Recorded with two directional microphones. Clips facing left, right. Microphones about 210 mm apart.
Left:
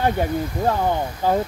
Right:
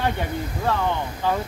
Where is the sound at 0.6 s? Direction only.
40° left (ahead or behind).